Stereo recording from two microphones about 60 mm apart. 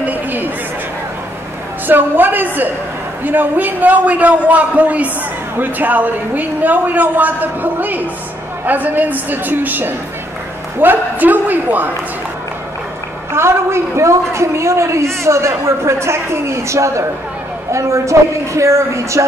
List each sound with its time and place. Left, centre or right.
0.0 s chatter: right
1.9 s a woman's voice: right
13.3 s a man's voice: right